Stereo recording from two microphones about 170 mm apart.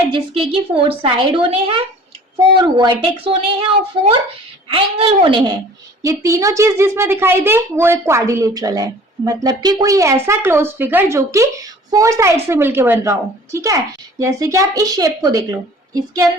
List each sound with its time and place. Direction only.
0.1 s a woman's voice: 30° right (ahead or behind)